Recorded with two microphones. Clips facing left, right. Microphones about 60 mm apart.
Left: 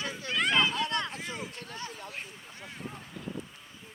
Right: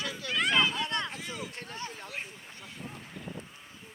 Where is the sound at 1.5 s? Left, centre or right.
Right.